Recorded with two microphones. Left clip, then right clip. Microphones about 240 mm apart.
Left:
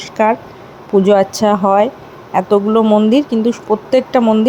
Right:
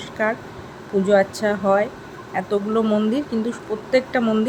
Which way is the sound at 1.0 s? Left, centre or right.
Left.